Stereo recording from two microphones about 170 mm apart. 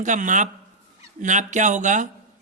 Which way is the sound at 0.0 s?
45° right (ahead or behind).